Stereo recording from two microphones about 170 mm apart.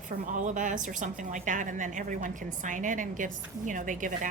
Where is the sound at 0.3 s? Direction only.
50° right (ahead or behind).